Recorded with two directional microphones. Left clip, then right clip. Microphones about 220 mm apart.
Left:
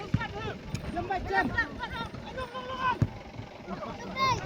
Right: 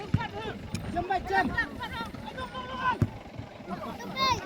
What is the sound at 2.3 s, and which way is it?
Boat, 10° left (ahead or behind).